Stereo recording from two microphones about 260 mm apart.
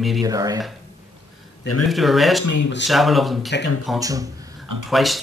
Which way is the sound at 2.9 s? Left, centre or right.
Centre.